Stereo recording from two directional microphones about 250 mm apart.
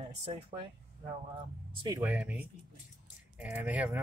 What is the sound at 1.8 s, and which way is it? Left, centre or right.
Speech, centre.